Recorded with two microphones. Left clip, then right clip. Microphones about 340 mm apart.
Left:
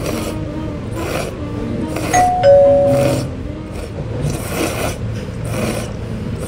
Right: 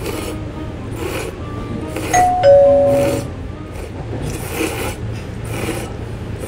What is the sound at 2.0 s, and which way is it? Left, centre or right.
Doorbell, centre.